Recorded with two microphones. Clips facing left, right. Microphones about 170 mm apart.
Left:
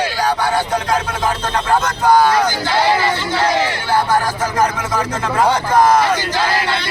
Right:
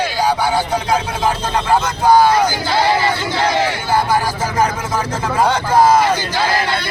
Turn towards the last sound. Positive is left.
turn(degrees=-10)  # may be behind; listen again after turning